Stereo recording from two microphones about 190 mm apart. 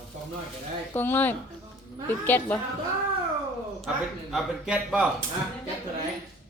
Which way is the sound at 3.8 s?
Centre (ahead or behind).